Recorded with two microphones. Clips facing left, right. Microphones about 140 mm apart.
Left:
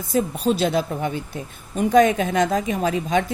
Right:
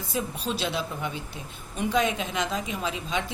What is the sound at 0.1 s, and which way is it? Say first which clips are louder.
A woman's voice: left 10 dB; 45° left (ahead or behind).